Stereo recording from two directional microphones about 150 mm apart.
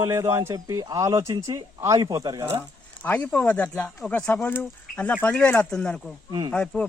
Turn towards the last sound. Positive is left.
turn(degrees=5)  # may be behind; listen again after turning